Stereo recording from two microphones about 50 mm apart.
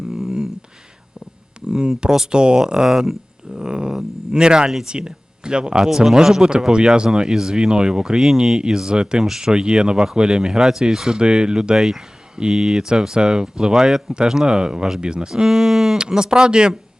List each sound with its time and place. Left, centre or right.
0.1 s a sound: centre
1.6 s speech: centre
9.2 s speech: centre